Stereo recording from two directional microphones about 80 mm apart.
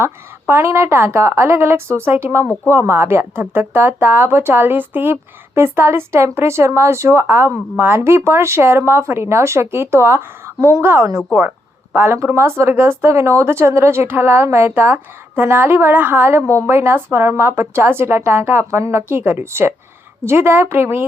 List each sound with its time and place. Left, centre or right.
0.0 s a woman's voice: right